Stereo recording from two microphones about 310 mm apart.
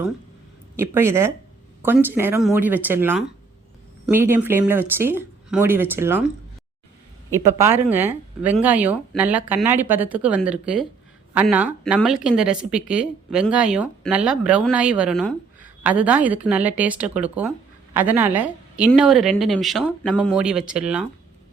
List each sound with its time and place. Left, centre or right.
0.8 s speech: centre
7.3 s speech: centre